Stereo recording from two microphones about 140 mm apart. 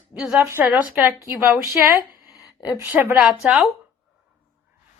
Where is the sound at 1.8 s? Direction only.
10° right (ahead or behind).